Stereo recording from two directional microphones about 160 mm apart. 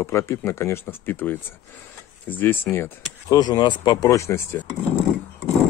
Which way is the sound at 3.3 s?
25° left (ahead or behind).